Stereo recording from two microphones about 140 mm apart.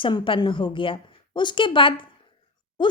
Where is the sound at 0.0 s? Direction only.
35° left (ahead or behind).